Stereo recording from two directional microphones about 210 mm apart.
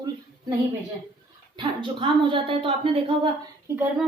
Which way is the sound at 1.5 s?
25° right (ahead or behind).